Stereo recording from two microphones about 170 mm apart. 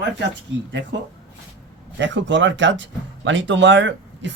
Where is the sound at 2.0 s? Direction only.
90° right.